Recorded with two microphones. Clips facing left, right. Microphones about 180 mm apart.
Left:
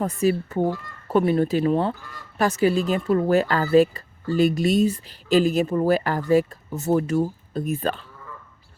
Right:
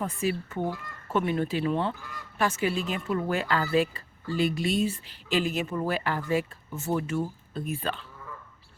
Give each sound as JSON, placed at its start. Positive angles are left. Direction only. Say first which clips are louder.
{"t": 0.0, "sound": "speech", "louder": "left 7 dB", "side_deg": 40}